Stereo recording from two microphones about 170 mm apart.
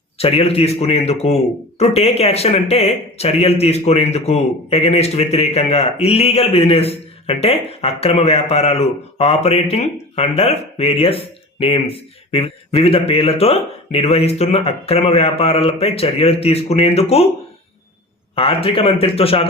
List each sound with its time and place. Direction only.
0.2 s speech: 35° left (ahead or behind)
18.3 s speech: 35° left (ahead or behind)